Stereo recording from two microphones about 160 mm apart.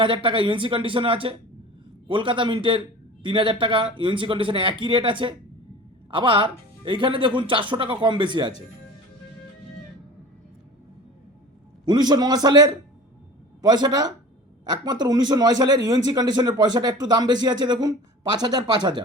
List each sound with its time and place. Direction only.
0.0 s a man's voice: 30° right (ahead or behind)
11.9 s a man's voice: 25° right (ahead or behind)